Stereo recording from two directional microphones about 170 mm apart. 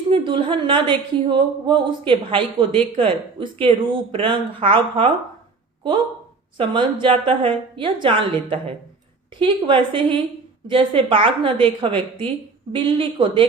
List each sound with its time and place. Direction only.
0.1 s a woman's voice: 30° right (ahead or behind)
6.6 s a woman's voice: 30° right (ahead or behind)